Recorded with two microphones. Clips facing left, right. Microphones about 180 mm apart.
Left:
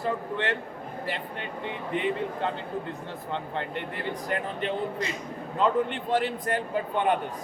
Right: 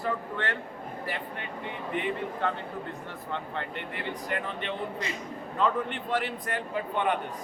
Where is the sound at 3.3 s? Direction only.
30° left (ahead or behind).